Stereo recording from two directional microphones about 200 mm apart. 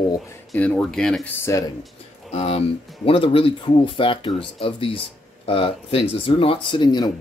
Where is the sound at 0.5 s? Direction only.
5° left (ahead or behind).